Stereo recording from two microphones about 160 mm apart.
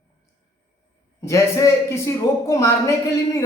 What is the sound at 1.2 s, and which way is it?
Speech, 20° left (ahead or behind).